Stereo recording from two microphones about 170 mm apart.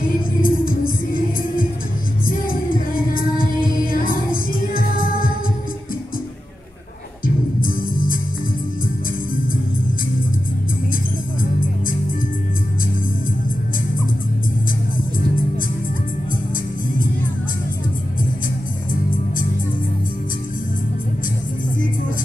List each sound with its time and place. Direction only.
0.4 s music: 55° left (ahead or behind)
7.2 s music: 55° left (ahead or behind)